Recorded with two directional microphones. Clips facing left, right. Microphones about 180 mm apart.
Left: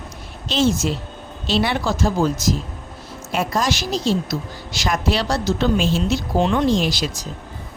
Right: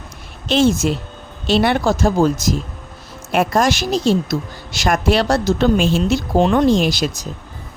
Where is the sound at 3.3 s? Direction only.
55° right (ahead or behind).